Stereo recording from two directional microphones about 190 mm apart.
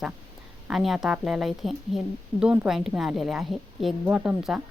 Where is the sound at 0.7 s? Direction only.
Centre (ahead or behind).